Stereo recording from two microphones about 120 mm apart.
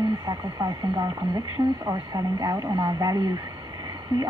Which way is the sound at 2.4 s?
30° right (ahead or behind).